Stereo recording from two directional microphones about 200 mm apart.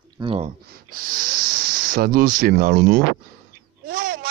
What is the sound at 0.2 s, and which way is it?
Speech, 30° right (ahead or behind).